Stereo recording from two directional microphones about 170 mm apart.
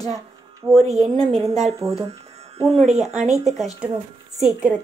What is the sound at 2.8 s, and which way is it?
Speech, 40° right (ahead or behind).